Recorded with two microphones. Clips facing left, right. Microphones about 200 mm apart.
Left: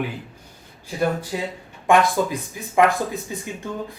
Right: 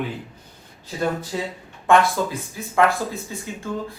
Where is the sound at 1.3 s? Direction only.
15° left (ahead or behind).